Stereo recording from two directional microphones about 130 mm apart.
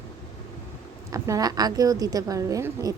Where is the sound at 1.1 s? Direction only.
25° right (ahead or behind).